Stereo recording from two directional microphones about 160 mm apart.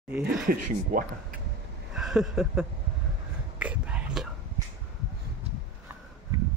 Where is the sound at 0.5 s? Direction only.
60° right (ahead or behind).